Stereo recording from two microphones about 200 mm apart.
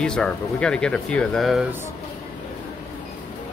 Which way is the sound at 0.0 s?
5° left (ahead or behind).